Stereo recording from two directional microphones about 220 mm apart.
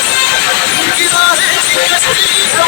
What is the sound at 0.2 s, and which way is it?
Music, 55° left (ahead or behind).